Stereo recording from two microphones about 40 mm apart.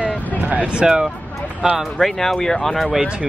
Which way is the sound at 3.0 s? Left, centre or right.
Right.